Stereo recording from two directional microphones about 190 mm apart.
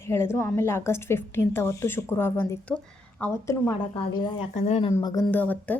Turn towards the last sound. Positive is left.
turn(degrees=10)  # may be behind; listen again after turning